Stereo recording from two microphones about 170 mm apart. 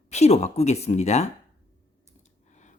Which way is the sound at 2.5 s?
45° left (ahead or behind).